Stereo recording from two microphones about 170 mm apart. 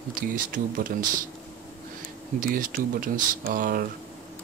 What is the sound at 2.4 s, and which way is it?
Speech, 55° right (ahead or behind).